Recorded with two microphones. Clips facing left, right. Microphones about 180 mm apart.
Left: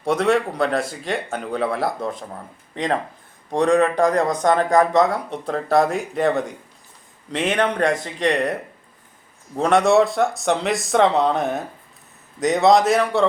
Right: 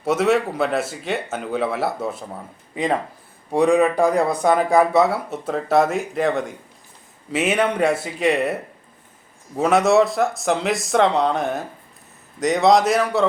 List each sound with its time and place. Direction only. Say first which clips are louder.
0.0 s a man's voice: even; 5° right (ahead or behind)
9.6 s a man's voice: even; 5° right (ahead or behind)